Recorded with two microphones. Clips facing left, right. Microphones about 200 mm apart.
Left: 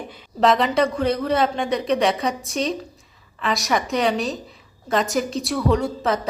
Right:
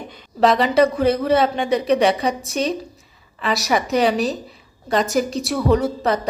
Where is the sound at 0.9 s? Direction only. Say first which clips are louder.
Right 4 dB; 5° right (ahead or behind).